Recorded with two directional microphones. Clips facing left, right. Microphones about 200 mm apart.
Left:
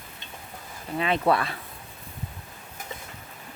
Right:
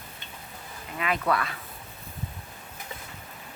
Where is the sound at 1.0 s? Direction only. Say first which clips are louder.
Left 4 dB; 30° left (ahead or behind).